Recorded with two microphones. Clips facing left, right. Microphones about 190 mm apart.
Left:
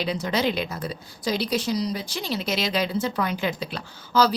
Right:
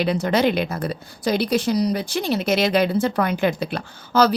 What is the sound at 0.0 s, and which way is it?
A woman's voice, 55° right (ahead or behind).